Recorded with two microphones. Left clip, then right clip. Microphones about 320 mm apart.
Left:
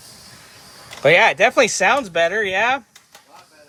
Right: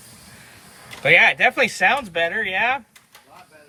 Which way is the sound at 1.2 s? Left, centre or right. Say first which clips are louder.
Left 2 dB; centre.